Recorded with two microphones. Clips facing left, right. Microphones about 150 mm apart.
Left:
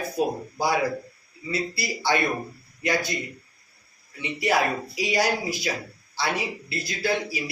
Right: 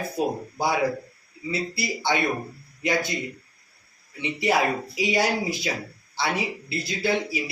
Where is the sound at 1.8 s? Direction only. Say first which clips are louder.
Left 1 dB; 20° right (ahead or behind).